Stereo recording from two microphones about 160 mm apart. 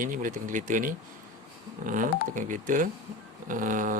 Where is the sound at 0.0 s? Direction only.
55° right (ahead or behind).